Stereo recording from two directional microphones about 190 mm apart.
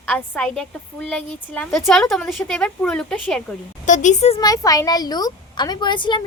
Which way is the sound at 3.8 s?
40° left (ahead or behind).